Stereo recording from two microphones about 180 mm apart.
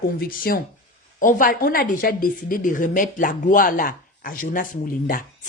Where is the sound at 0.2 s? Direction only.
55° left (ahead or behind).